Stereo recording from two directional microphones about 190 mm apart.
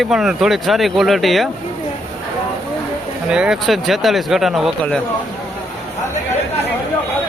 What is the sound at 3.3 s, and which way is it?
Speech, 5° right (ahead or behind).